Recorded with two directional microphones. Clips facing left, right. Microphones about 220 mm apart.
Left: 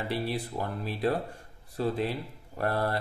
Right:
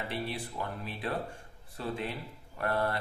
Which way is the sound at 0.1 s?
40° left (ahead or behind).